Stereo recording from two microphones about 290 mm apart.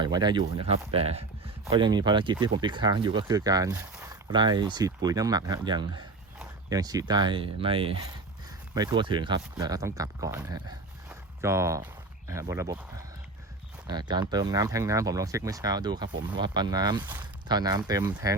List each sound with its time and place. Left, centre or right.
0.0 s speech: centre
13.8 s speech: centre